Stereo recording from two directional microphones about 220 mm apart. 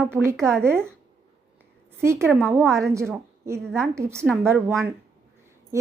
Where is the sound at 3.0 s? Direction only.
10° right (ahead or behind).